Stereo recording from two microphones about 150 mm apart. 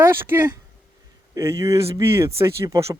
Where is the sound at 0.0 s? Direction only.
15° right (ahead or behind).